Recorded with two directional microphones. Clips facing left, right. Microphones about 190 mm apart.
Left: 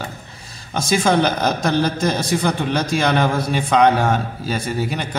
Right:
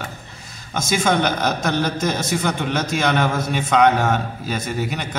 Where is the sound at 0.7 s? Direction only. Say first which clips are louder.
Left 2 dB; 30° left (ahead or behind).